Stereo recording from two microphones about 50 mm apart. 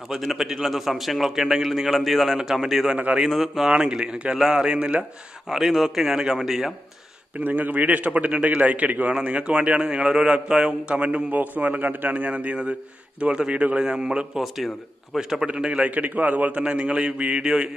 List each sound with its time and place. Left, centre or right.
0.1 s a man's voice: centre
4.7 s a man's voice: right
5.5 s a man's voice: centre
7.3 s a man's voice: right; by 17.6 s centre